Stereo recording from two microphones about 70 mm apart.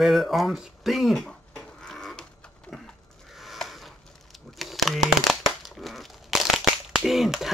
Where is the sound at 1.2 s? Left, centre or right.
Centre.